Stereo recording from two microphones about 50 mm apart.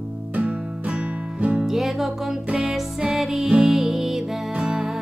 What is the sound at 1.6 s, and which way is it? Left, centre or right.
Music, centre.